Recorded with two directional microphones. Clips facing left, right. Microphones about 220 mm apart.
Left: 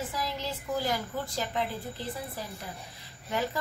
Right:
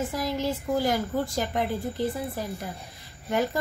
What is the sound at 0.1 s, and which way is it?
Speech, 50° right (ahead or behind).